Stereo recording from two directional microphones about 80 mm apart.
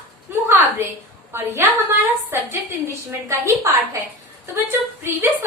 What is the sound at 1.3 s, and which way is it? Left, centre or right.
A woman's voice, right.